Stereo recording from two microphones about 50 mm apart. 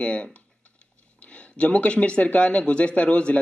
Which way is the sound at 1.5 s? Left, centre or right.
Left.